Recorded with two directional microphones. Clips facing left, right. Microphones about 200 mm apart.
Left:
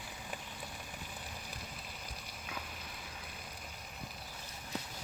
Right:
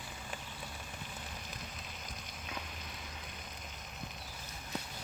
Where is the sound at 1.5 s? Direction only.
10° left (ahead or behind).